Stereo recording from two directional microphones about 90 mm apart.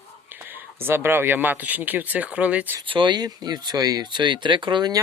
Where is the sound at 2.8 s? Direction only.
65° right (ahead or behind); by 4.0 s 45° right (ahead or behind).